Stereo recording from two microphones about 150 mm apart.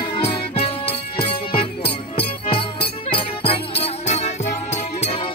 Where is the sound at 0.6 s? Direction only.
40° left (ahead or behind).